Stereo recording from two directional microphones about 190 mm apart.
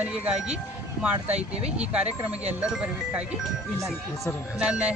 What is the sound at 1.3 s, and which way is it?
Speech, 35° right (ahead or behind).